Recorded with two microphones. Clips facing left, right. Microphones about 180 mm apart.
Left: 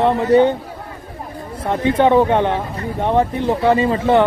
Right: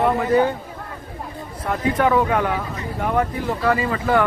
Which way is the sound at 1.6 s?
25° left (ahead or behind).